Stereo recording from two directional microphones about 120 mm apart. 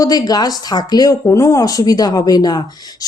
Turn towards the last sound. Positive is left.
turn(degrees=35)  # may be behind; listen again after turning